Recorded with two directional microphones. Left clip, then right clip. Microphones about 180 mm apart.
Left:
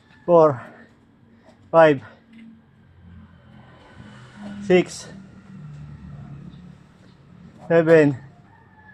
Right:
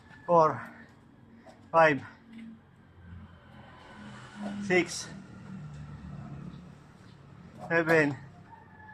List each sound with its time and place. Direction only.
0.3 s speech: 50° left (ahead or behind)
4.8 s speech: 50° left (ahead or behind)
7.7 s speech: 55° left (ahead or behind)